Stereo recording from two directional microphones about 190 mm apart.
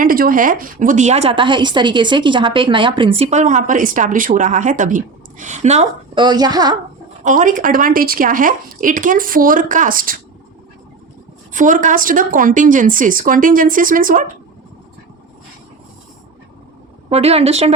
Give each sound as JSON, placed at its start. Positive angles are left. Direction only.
{"t": 0.0, "sound": "a woman's voice", "side_deg": -50}
{"t": 6.1, "sound": "a woman's voice", "side_deg": -20}
{"t": 7.3, "sound": "speech", "side_deg": -45}
{"t": 11.5, "sound": "speech", "side_deg": -40}
{"t": 17.1, "sound": "a woman's voice", "side_deg": -35}